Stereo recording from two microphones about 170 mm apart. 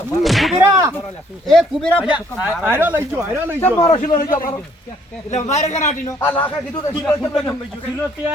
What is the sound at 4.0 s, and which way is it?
Speech, 55° left (ahead or behind).